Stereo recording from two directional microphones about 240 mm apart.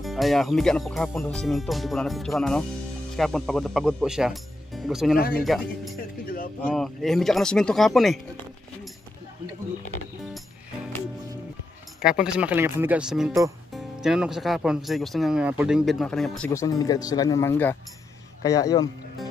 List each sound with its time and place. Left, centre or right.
0.0 s speech: centre
5.9 s speech: left
6.7 s speech: centre
12.0 s speech: centre